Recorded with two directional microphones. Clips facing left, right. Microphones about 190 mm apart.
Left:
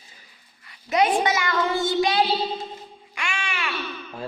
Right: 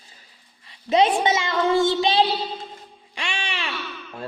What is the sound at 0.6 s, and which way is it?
Dog, 25° right (ahead or behind).